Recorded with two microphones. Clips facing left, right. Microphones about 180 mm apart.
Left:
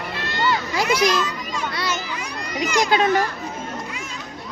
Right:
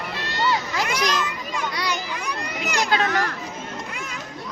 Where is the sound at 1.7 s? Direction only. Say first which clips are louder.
Left 2 dB; 15° right (ahead or behind).